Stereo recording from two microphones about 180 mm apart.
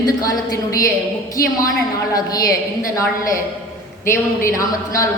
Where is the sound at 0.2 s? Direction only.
20° left (ahead or behind).